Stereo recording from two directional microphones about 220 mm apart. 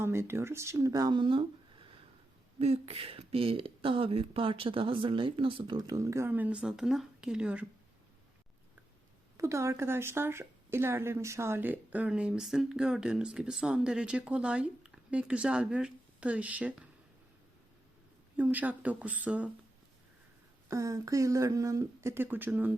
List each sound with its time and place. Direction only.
0.0 s speech: 10° right (ahead or behind)
9.4 s a woman's voice: 15° right (ahead or behind)
18.3 s speech: 5° right (ahead or behind)
20.7 s speech: 15° right (ahead or behind)